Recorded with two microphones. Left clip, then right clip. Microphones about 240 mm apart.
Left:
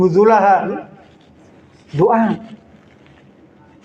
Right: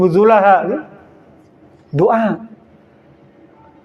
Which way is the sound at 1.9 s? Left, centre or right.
Right.